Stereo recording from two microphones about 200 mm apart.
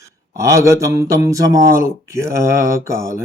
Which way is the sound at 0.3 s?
15° right (ahead or behind).